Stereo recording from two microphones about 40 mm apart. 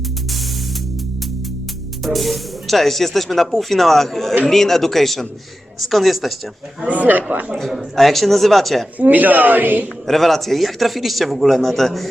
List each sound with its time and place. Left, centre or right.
2.0 s speech: centre
6.8 s speech: right
7.5 s speech: centre
9.0 s speech: right
10.1 s speech: centre